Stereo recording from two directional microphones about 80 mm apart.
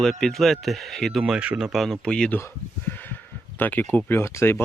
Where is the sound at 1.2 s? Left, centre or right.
Centre.